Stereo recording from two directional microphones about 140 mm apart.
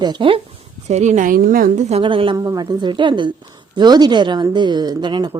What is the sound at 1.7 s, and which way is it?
Speech, 55° right (ahead or behind).